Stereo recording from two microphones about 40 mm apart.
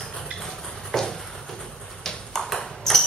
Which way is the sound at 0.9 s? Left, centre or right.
Centre.